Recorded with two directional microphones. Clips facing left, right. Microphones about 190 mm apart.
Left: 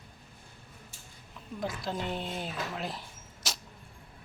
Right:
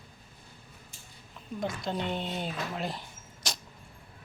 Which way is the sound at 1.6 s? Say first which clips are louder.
Right 2 dB; centre (ahead or behind).